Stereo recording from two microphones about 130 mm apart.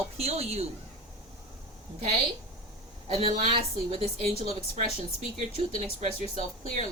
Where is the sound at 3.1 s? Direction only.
55° right (ahead or behind).